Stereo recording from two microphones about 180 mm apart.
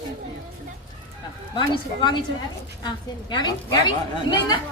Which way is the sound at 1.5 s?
25° left (ahead or behind).